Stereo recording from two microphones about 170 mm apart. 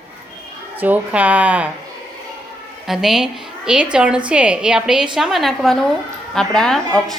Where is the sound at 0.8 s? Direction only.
10° right (ahead or behind).